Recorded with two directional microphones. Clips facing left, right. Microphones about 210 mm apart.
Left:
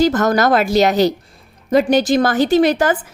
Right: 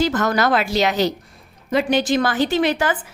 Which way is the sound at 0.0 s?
40° left (ahead or behind).